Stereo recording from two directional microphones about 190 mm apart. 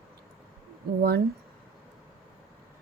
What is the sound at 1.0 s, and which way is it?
Speech, 55° right (ahead or behind).